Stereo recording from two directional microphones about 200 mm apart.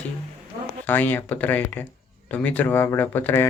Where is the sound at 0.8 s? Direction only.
10° left (ahead or behind).